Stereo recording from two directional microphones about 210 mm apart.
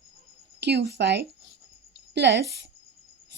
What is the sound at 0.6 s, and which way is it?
Speech, 55° right (ahead or behind).